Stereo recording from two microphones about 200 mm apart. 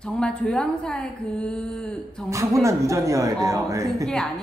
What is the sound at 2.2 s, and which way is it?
Speech, 15° right (ahead or behind).